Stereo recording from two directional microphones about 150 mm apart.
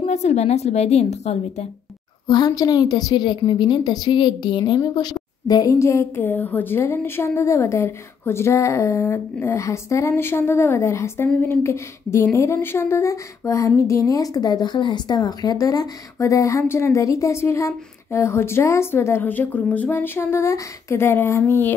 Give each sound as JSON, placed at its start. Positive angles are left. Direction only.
{"t": 0.0, "sound": "a woman's voice", "side_deg": 50}
{"t": 2.2, "sound": "speech", "side_deg": 30}